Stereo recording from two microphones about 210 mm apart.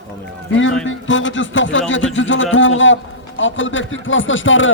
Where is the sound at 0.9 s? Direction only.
65° left (ahead or behind).